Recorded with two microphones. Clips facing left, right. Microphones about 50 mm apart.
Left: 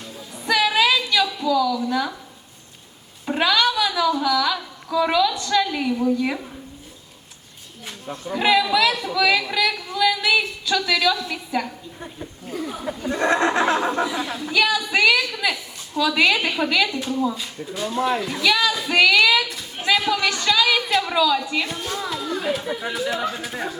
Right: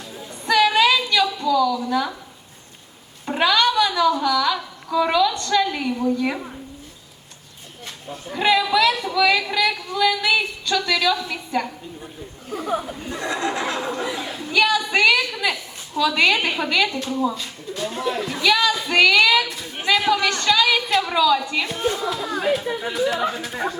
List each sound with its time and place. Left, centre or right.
0.4 s a sound: centre
3.2 s a woman's voice: centre
8.3 s speech: centre
13.1 s speech: left
14.5 s a woman's voice: centre
22.2 s speech: right
22.5 s speech: centre